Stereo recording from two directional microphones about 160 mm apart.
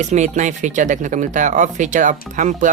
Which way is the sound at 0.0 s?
50° right (ahead or behind).